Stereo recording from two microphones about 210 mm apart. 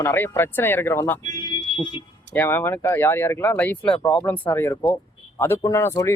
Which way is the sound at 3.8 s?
25° left (ahead or behind).